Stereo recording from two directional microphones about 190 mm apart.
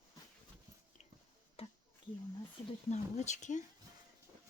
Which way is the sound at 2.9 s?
40° left (ahead or behind).